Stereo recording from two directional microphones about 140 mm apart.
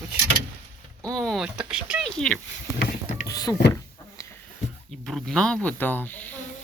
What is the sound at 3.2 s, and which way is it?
Speech, 25° left (ahead or behind).